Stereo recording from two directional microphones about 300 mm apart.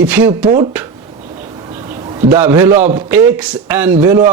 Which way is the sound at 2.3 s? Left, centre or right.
Centre.